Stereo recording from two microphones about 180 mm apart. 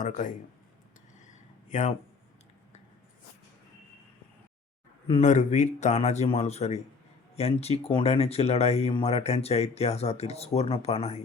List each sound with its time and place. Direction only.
0.0 s speech: 45° left (ahead or behind)
1.7 s speech: 40° left (ahead or behind)
5.0 s speech: 40° left (ahead or behind)